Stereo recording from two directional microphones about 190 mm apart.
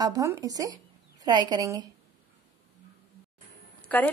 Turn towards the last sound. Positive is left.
turn(degrees=10)  # may be behind; listen again after turning